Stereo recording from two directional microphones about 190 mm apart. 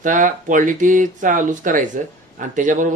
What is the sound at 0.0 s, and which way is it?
Speech, 45° right (ahead or behind).